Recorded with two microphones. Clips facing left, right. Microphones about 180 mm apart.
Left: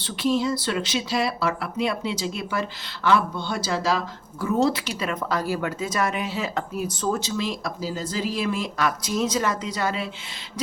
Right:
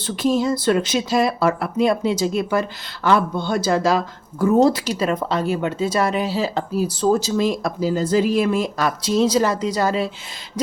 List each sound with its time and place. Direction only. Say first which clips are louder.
0.0 s speech: right 4 dB; 45° right (ahead or behind)
9.0 s speech: right 7 dB; 30° right (ahead or behind)